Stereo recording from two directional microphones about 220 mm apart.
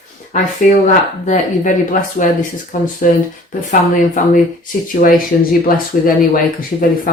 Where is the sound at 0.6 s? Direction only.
35° left (ahead or behind).